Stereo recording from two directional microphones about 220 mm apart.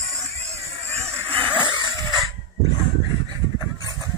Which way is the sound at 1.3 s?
25° right (ahead or behind).